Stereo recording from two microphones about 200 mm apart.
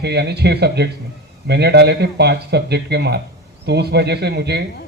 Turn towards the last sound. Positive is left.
turn(degrees=-55)  # may be behind; listen again after turning